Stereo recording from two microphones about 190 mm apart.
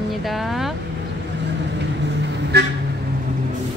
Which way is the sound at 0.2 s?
Centre (ahead or behind).